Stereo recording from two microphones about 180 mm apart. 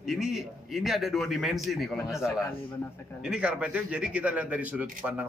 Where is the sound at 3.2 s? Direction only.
5° right (ahead or behind).